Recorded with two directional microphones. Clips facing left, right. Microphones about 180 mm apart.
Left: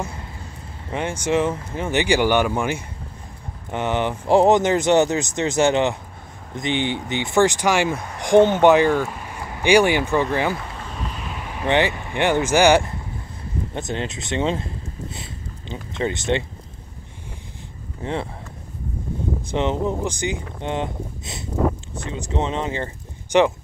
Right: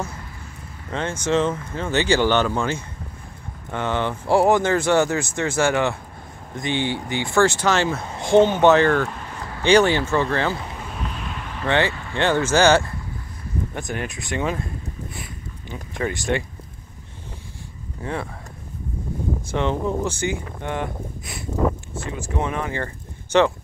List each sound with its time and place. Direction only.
0.8 s speech: 15° left (ahead or behind)
11.0 s vehicle: centre (ahead or behind)
13.7 s speech: 20° left (ahead or behind)
15.7 s speech: 20° left (ahead or behind)
18.0 s speech: 25° left (ahead or behind)
19.5 s speech: 20° left (ahead or behind)